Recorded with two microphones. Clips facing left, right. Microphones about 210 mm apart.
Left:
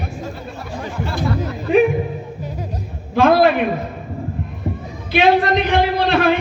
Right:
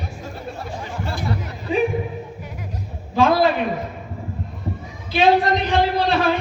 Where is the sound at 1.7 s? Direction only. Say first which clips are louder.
Left 7 dB; 60° left (ahead or behind).